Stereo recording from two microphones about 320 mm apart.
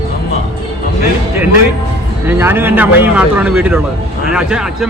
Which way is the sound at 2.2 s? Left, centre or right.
Centre.